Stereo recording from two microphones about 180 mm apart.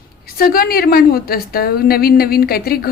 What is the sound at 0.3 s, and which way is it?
A woman's voice, 55° left (ahead or behind).